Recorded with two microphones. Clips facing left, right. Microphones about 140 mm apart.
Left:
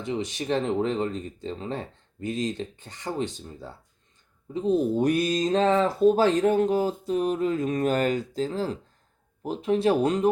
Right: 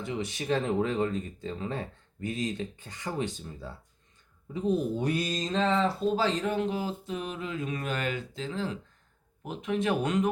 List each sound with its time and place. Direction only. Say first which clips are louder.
0.0 s speech: left 4 dB; 25° left (ahead or behind)
4.9 s speech: left 7 dB; 50° left (ahead or behind); by 10.2 s 35° left (ahead or behind)